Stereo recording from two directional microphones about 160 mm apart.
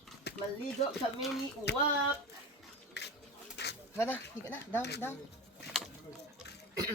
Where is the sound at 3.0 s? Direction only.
90° left.